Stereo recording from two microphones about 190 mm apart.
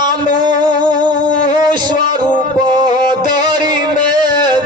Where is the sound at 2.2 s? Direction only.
20° right (ahead or behind).